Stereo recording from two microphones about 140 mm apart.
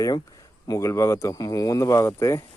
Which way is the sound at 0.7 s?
20° left (ahead or behind).